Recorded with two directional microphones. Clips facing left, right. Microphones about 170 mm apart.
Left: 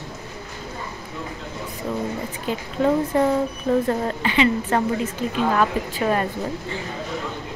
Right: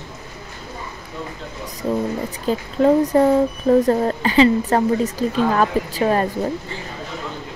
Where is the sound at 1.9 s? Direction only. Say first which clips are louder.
Right 6 dB; 35° right (ahead or behind).